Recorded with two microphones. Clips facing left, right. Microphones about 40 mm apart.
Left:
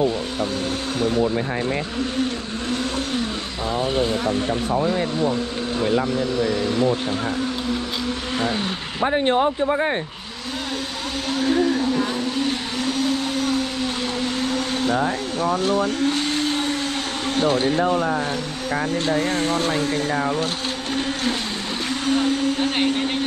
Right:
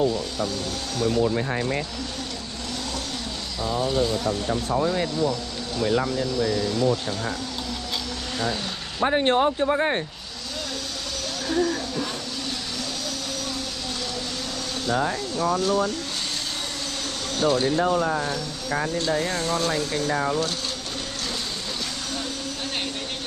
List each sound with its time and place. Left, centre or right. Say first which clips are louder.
2.7 s vehicle: left 8 dB; left
8.4 s vehicle: left 3 dB; left
11.3 s vehicle: left 5 dB; left
15.6 s vacuum cleaner: left 4 dB; left
17.4 s speech: left 2 dB; left
19.0 s speech: left 4 dB; left
20.9 s a sound: left 8 dB; left
22.0 s speech: left 11 dB; left